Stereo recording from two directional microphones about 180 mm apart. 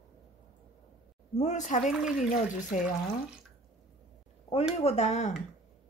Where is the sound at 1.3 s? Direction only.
40° left (ahead or behind).